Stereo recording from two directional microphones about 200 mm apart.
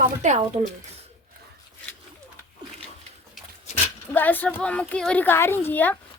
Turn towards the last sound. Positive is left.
turn(degrees=10)  # may be behind; listen again after turning